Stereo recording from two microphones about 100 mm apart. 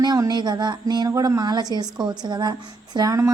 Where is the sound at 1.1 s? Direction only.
40° right (ahead or behind).